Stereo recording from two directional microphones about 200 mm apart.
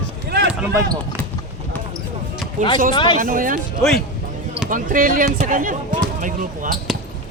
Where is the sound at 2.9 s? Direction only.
20° left (ahead or behind).